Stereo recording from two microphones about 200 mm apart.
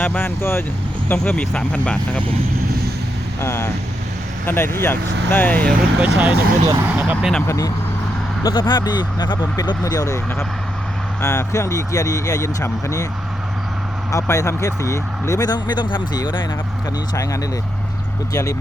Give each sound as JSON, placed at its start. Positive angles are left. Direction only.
{"t": 0.0, "sound": "speech", "side_deg": 10}
{"t": 3.4, "sound": "speech", "side_deg": 10}
{"t": 6.1, "sound": "speech", "side_deg": -10}
{"t": 7.4, "sound": "speech", "side_deg": 15}
{"t": 14.1, "sound": "speech", "side_deg": 15}